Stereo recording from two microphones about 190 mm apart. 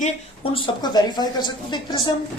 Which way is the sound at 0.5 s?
25° left (ahead or behind).